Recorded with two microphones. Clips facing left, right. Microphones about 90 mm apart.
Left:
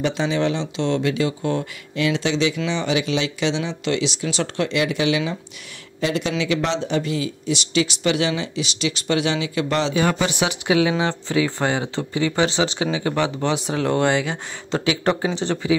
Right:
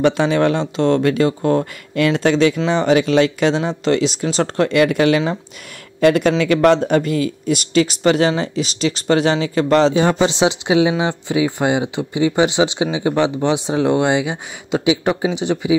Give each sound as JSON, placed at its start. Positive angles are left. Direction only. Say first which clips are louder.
{"t": 0.0, "sound": "speech", "louder": "right 6 dB", "side_deg": -60}
{"t": 10.0, "sound": "speech", "louder": "right 6 dB", "side_deg": -25}